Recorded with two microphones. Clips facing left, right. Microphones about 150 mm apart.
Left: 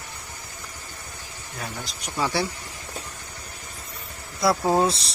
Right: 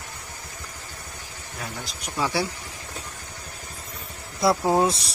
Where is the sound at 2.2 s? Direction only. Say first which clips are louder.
Even; 5° right (ahead or behind).